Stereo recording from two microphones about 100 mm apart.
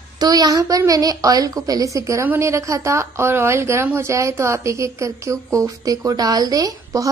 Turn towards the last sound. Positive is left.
turn(degrees=-35)  # may be behind; listen again after turning